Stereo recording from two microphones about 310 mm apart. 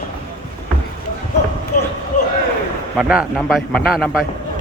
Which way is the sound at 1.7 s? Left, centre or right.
Left.